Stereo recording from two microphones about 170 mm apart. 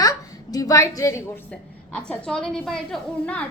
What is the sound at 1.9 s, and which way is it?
A woman's voice, 5° left (ahead or behind).